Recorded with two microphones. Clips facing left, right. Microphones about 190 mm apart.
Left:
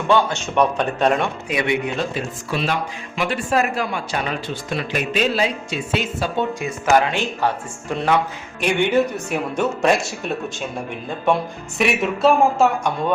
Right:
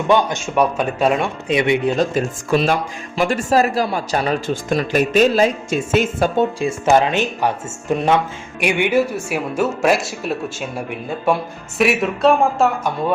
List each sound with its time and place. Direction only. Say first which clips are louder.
0.1 s a man's voice: right 1 dB; 15° right (ahead or behind)
1.5 s speech: right 9 dB; 25° right (ahead or behind)
2.0 s speech: right 6 dB; 45° right (ahead or behind)
6.6 s speech: right 1 dB; 25° right (ahead or behind)
8.6 s a man's voice: right 1 dB; 10° right (ahead or behind)
11.8 s speech: right 2 dB; centre (ahead or behind)